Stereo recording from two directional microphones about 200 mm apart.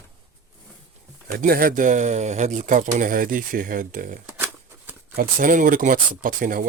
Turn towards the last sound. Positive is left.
turn(degrees=-45)  # may be behind; listen again after turning